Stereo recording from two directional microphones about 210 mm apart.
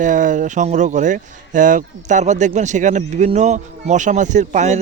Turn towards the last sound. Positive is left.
turn(degrees=-35)  # may be behind; listen again after turning